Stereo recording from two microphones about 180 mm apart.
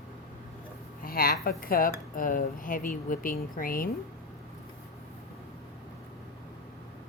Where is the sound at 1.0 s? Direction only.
55° left (ahead or behind).